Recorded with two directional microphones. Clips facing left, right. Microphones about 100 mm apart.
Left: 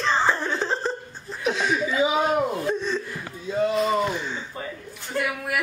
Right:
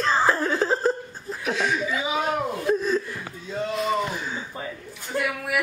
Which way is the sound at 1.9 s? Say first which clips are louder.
Left 4 dB; 20° left (ahead or behind).